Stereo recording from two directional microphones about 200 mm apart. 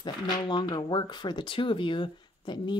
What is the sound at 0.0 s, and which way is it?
Speech, 20° left (ahead or behind).